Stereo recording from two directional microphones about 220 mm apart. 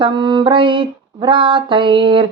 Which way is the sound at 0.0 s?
20° right (ahead or behind).